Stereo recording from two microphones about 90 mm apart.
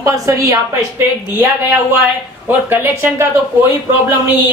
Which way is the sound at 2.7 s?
25° right (ahead or behind).